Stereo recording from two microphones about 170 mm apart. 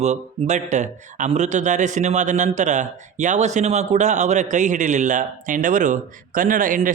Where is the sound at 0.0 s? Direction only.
45° right (ahead or behind).